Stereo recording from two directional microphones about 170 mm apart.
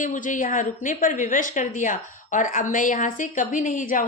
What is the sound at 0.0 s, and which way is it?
A woman's voice, 50° left (ahead or behind).